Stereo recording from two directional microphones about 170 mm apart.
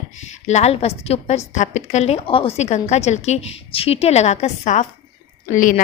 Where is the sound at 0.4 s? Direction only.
40° left (ahead or behind).